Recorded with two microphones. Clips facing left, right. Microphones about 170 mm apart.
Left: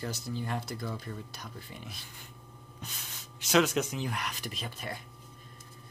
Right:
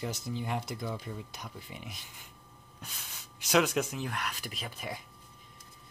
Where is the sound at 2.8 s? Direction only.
5° right (ahead or behind).